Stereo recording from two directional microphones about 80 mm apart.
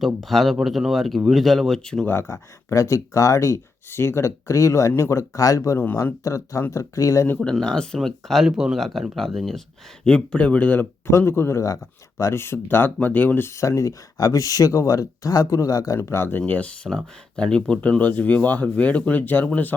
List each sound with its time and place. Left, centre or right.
0.0 s speech: centre
2.0 s speech: left
5.8 s speech: left
6.2 s speech: left
7.5 s speech: centre
13.6 s speech: left
16.0 s speech: left
16.5 s speech: centre